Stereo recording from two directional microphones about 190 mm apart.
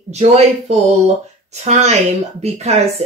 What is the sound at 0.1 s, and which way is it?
Speech, 35° right (ahead or behind).